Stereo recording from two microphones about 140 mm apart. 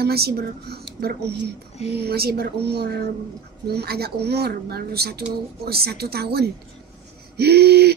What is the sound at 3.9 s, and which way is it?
A woman's voice, 90° right.